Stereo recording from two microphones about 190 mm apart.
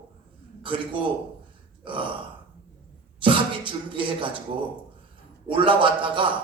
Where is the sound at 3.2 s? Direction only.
25° right (ahead or behind).